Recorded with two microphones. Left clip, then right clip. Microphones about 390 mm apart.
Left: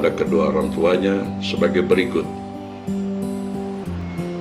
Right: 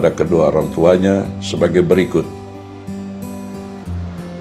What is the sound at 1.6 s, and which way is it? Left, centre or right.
Speech, right.